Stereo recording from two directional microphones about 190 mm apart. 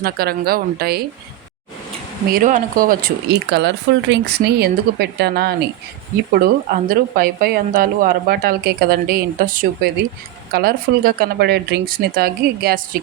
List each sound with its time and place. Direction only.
0.0 s speech: 55° right (ahead or behind)
2.3 s a woman's voice: 40° right (ahead or behind)